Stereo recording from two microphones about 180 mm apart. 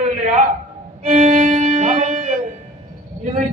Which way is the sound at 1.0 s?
40° right (ahead or behind).